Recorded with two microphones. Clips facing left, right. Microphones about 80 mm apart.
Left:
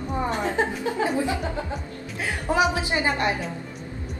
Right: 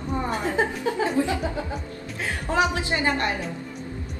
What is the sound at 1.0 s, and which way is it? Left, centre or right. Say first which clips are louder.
A woman's voice: right 1 dB; left.